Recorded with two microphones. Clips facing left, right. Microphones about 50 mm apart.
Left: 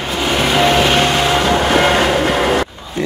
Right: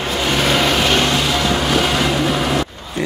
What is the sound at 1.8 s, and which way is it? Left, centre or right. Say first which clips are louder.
Vehicle: left 4 dB; left.